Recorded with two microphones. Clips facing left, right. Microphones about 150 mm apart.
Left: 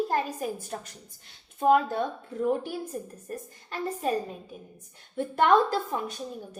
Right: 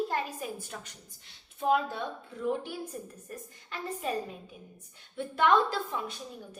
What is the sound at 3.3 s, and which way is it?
Speech, 40° left (ahead or behind).